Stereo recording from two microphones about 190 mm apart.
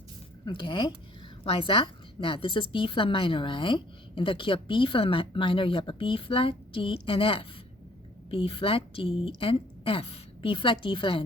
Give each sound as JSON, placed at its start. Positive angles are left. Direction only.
{"t": 0.4, "sound": "a woman's voice", "side_deg": 25}